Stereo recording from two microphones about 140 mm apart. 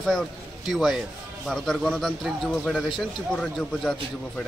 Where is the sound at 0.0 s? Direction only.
Centre (ahead or behind).